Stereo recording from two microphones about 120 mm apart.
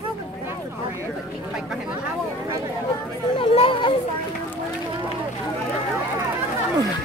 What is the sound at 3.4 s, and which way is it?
Chatter, 50° left (ahead or behind).